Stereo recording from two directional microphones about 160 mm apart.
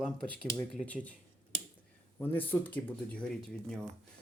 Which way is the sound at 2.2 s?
10° left (ahead or behind).